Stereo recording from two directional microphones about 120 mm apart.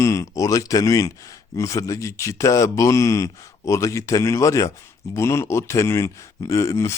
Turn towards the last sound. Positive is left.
turn(degrees=25)  # may be behind; listen again after turning